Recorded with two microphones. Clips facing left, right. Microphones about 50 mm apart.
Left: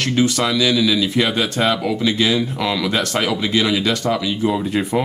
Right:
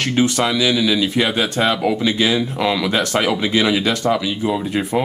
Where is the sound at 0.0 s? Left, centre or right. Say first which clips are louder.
Even; right.